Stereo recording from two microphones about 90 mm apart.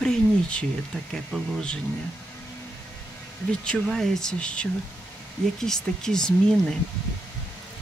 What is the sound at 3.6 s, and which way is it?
Speech, 10° left (ahead or behind).